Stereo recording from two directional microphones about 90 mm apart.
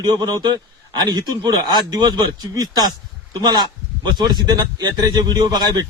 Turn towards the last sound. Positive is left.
turn(degrees=-50)  # may be behind; listen again after turning